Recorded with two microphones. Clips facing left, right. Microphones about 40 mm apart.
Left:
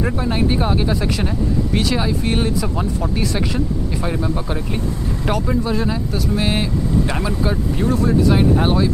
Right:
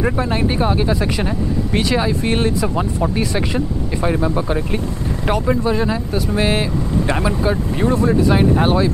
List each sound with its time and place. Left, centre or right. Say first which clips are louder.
0.3 s speech: right 1 dB; centre
1.0 s speech: right 1 dB; centre
2.2 s speech: right 2 dB; right
7.7 s speech: right 1 dB; right
8.4 s speech: right 1 dB; centre